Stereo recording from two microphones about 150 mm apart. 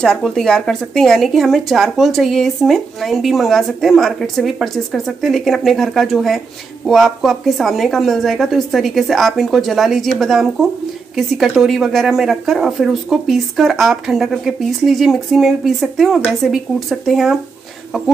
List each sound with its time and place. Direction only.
0.0 s a woman's voice: 5° left (ahead or behind)